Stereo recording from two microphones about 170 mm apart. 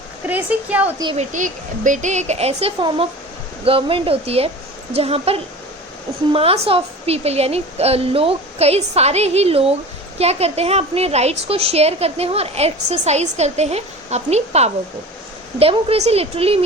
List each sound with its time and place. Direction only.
0.3 s a woman's voice: 10° right (ahead or behind)
1.1 s a woman's voice: 45° right (ahead or behind)